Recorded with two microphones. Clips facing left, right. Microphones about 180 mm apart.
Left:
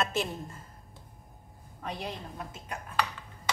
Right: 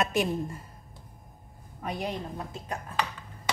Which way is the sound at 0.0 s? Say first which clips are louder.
Right 4 dB; 15° right (ahead or behind).